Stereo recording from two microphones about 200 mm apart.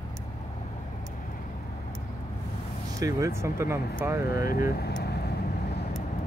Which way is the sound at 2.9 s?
15° right (ahead or behind).